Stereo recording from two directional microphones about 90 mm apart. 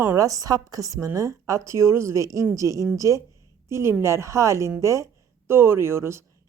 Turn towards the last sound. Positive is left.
turn(degrees=-30)  # may be behind; listen again after turning